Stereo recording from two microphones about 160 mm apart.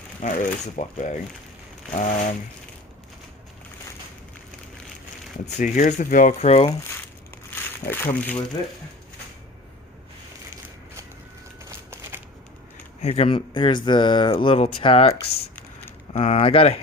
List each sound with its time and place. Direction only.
0.2 s speech: 50° left (ahead or behind)
5.5 s speech: 50° left (ahead or behind)
7.9 s speech: 10° left (ahead or behind)
13.0 s speech: 40° left (ahead or behind)
16.1 s speech: 45° left (ahead or behind)